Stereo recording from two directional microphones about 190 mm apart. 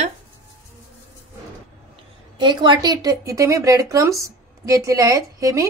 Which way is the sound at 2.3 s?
20° right (ahead or behind).